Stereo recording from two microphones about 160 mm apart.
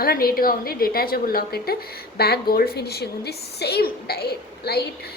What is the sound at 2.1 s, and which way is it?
A woman's voice, 80° left.